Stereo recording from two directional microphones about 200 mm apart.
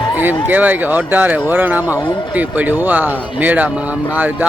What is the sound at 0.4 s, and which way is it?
Speech, 10° right (ahead or behind).